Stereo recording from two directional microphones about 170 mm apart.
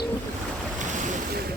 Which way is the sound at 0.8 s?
45° right (ahead or behind).